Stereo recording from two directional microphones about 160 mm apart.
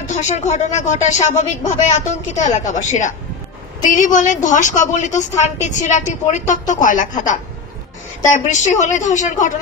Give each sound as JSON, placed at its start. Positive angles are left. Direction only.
{"t": 0.1, "sound": "a woman's voice", "side_deg": 50}
{"t": 8.2, "sound": "a woman's voice", "side_deg": 50}